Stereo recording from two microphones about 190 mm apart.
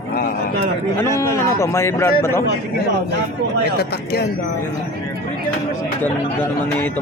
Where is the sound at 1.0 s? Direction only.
15° left (ahead or behind).